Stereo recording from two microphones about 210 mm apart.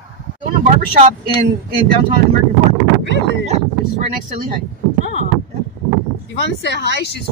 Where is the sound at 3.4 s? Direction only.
30° right (ahead or behind).